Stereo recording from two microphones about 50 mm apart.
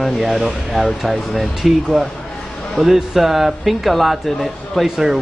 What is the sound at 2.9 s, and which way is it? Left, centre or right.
Speech, centre.